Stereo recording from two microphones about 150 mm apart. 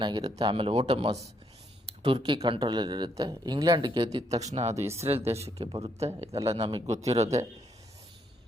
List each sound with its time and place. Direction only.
0.0 s speech: 25° right (ahead or behind)
0.5 s speech: 40° right (ahead or behind)
4.4 s speech: 45° right (ahead or behind)
6.8 s speech: 45° right (ahead or behind)